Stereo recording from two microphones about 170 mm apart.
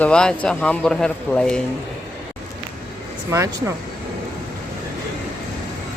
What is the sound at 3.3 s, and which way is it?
Speech, 15° right (ahead or behind).